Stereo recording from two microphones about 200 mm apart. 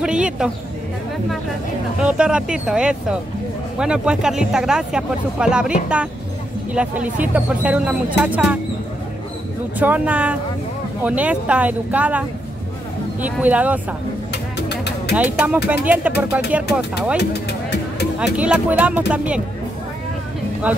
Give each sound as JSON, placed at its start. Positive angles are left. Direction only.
{"t": 0.0, "sound": "a sound", "side_deg": -5}
{"t": 2.0, "sound": "speech", "side_deg": -5}
{"t": 9.8, "sound": "speech", "side_deg": -5}
{"t": 14.3, "sound": "vehicle", "side_deg": 55}
{"t": 15.1, "sound": "speech", "side_deg": -10}
{"t": 17.2, "sound": "music", "side_deg": 60}
{"t": 18.2, "sound": "speech", "side_deg": -5}